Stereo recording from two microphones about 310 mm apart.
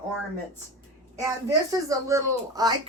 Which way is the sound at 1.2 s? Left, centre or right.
Centre.